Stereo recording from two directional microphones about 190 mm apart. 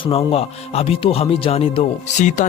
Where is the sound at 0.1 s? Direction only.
30° left (ahead or behind).